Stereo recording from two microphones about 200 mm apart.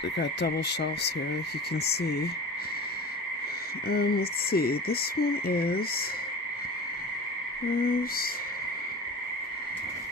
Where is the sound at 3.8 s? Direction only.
50° left (ahead or behind).